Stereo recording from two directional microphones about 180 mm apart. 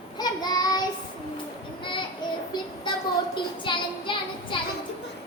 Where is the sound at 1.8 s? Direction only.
25° left (ahead or behind).